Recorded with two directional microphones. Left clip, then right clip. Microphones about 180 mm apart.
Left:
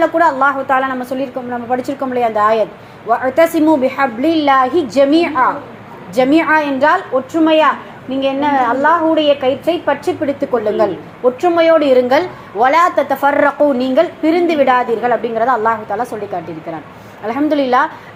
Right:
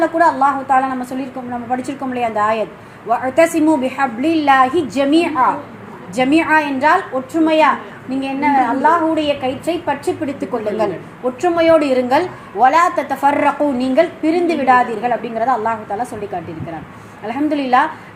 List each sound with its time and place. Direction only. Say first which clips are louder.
0.0 s a woman's voice: left 1 dB; 15° left (ahead or behind)